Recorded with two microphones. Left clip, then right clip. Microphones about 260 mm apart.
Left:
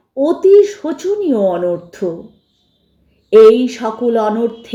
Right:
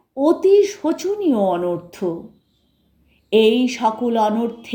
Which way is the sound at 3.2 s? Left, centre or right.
Centre.